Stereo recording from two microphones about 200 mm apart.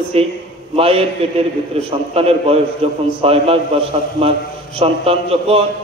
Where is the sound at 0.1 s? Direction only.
30° right (ahead or behind).